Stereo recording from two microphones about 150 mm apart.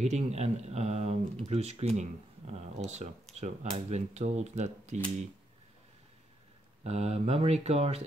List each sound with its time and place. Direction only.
0.0 s speech: 50° right (ahead or behind)
6.8 s speech: 45° right (ahead or behind)